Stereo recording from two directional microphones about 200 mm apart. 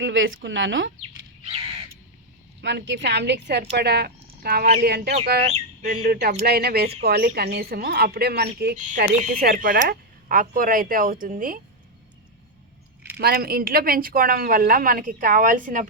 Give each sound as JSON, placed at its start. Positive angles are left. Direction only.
{"t": 0.0, "sound": "speech", "side_deg": -70}
{"t": 2.6, "sound": "speech", "side_deg": -60}
{"t": 5.5, "sound": "bird", "side_deg": -35}
{"t": 6.1, "sound": "speech", "side_deg": -50}
{"t": 13.1, "sound": "speech", "side_deg": -50}